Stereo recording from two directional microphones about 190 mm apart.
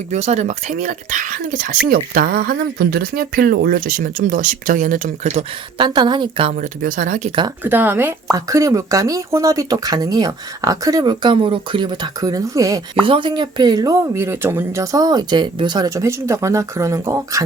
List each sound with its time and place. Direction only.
0.1 s speech: 35° right (ahead or behind)
5.8 s a woman's voice: 25° right (ahead or behind)
6.6 s speech: 45° right (ahead or behind)
7.6 s speech: 10° right (ahead or behind)